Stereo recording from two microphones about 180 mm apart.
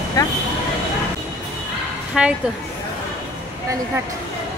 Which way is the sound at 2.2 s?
5° right (ahead or behind).